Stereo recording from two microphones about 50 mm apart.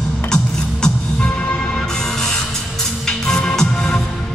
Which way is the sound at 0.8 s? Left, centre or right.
Left.